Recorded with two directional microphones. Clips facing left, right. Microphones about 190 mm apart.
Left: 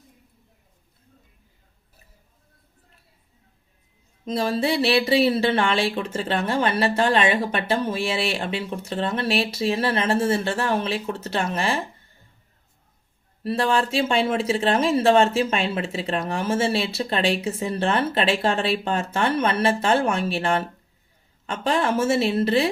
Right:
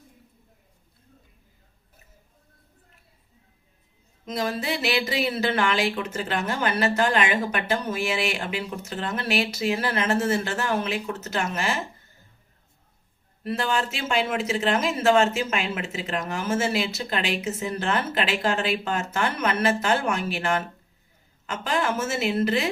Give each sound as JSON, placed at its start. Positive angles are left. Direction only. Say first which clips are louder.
{"t": 4.3, "sound": "speech", "louder": "left 5 dB", "side_deg": 30}
{"t": 13.4, "sound": "speech", "louder": "left 4 dB", "side_deg": 30}